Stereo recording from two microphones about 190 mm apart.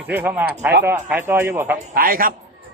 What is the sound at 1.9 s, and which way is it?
Speech, 50° right (ahead or behind).